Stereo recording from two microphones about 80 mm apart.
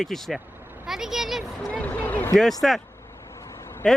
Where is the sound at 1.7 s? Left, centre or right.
Centre.